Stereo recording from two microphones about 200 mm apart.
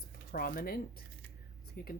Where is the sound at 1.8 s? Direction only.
50° left (ahead or behind).